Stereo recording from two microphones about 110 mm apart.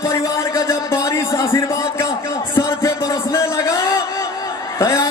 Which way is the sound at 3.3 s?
25° left (ahead or behind).